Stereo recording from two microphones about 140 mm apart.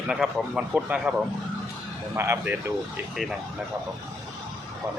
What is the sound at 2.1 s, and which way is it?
Speech, 15° right (ahead or behind).